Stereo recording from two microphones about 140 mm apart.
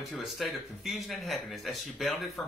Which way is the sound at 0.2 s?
Centre (ahead or behind).